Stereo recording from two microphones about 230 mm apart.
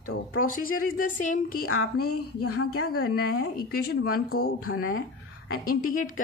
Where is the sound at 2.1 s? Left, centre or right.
Left.